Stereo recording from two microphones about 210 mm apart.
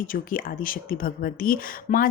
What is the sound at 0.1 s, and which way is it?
Speech, 40° left (ahead or behind).